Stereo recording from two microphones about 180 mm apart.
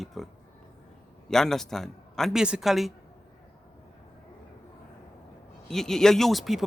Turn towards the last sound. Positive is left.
turn(degrees=0)  # may be behind; listen again after turning